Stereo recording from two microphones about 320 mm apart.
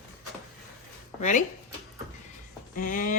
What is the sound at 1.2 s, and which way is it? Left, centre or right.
Speech, left.